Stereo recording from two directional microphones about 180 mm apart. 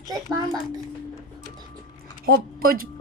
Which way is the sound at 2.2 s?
55° right (ahead or behind).